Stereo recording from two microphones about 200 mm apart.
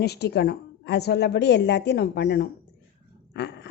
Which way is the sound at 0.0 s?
55° left (ahead or behind).